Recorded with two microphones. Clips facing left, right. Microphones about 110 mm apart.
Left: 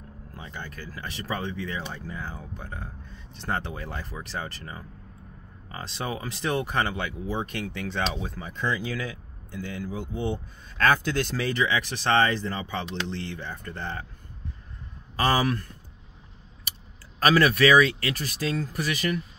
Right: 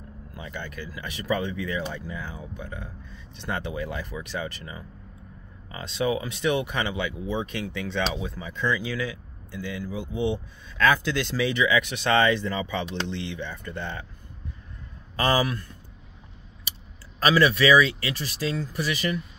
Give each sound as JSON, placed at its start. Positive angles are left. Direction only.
{"t": 0.3, "sound": "speech", "side_deg": 30}
{"t": 17.2, "sound": "speech", "side_deg": 45}